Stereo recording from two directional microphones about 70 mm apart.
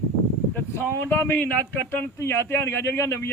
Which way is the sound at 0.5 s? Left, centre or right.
Left.